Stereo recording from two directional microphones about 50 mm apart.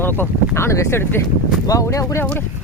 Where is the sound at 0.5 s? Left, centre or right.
Left.